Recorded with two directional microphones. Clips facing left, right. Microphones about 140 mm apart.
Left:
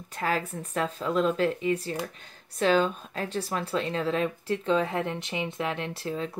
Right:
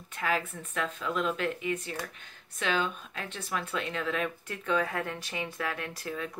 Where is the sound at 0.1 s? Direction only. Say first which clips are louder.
Left 2 dB; 35° left (ahead or behind).